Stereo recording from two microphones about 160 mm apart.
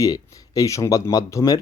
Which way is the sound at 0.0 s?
20° left (ahead or behind).